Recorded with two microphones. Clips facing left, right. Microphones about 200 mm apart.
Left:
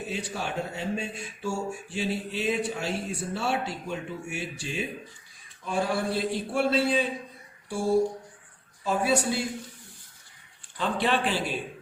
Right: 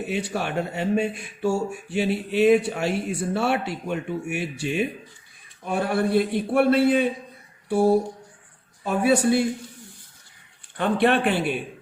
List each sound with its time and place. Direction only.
0.1 s speech: 65° right (ahead or behind)
10.8 s speech: 60° right (ahead or behind)